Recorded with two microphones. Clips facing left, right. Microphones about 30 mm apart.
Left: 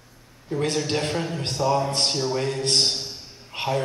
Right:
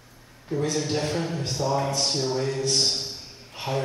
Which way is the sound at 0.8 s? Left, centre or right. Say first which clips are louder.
Left 1 dB; left.